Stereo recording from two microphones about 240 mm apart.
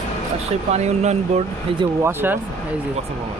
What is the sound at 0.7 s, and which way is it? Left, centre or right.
Speech, right.